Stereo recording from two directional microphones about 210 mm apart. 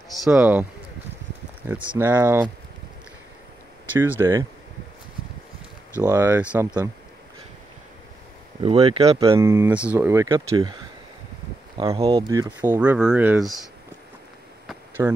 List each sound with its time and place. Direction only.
0.2 s speech: 5° right (ahead or behind)
3.9 s speech: 10° right (ahead or behind)
6.0 s speech: 10° right (ahead or behind)
8.6 s speech: 30° right (ahead or behind)
9.2 s speech: 15° right (ahead or behind)
12.0 s speech: 25° right (ahead or behind)
12.5 s speech: 10° right (ahead or behind)
14.7 s a sound: 10° right (ahead or behind)